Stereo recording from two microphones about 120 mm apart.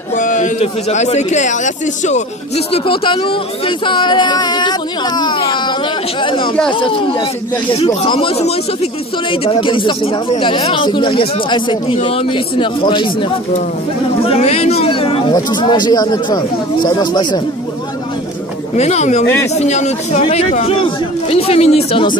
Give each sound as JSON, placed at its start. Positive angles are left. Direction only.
{"t": 0.1, "sound": "speech", "side_deg": 90}
{"t": 2.9, "sound": "speech", "side_deg": 45}
{"t": 14.2, "sound": "speech", "side_deg": 55}
{"t": 15.3, "sound": "speech", "side_deg": 35}
{"t": 18.8, "sound": "speech", "side_deg": 70}